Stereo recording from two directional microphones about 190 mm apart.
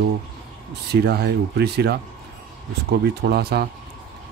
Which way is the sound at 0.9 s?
55° right (ahead or behind).